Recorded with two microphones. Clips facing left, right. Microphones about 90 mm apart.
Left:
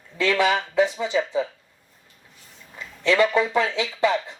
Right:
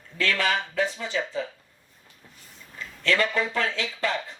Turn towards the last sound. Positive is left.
turn(degrees=15)  # may be behind; listen again after turning